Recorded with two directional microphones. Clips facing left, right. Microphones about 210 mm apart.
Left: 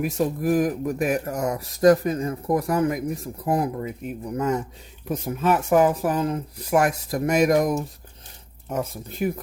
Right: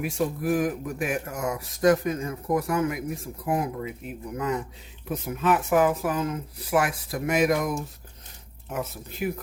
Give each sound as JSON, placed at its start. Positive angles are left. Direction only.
{"t": 0.0, "sound": "speech", "side_deg": 40}